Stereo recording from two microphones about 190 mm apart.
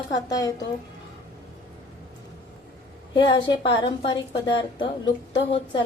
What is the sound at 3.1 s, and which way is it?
Speech, 25° left (ahead or behind).